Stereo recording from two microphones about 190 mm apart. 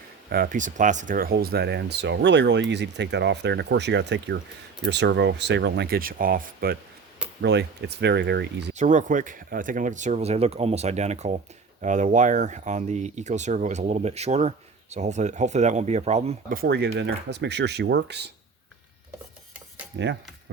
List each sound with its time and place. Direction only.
0.3 s speech: 50° right (ahead or behind)
7.4 s speech: 60° right (ahead or behind)
8.7 s speech: 40° right (ahead or behind)
16.6 s speech: 60° right (ahead or behind)